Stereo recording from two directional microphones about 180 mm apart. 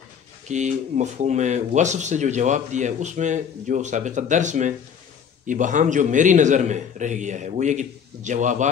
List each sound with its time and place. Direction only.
0.5 s a man's voice: 40° right (ahead or behind)